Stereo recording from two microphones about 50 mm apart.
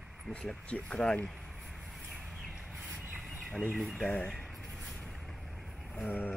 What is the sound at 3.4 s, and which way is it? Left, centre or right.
Speech, centre.